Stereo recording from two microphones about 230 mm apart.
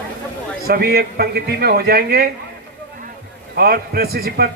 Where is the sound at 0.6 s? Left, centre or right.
Right.